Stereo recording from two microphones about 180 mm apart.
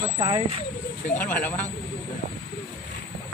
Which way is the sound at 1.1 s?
10° left (ahead or behind).